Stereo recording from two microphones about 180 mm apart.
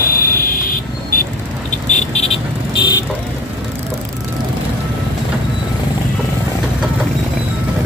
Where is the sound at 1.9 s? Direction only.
35° left (ahead or behind).